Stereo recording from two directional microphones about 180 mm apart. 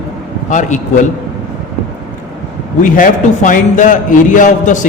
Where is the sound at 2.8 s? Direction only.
50° left (ahead or behind).